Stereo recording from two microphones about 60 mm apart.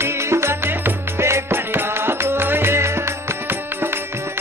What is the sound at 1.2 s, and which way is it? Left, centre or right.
Music, right.